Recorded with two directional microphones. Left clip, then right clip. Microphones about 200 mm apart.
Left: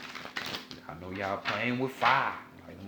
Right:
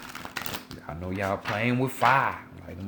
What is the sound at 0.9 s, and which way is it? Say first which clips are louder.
Speech: right 5 dB; 50° right (ahead or behind).